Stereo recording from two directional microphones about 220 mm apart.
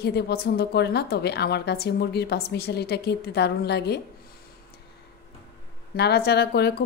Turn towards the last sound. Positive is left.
turn(degrees=45)  # may be behind; listen again after turning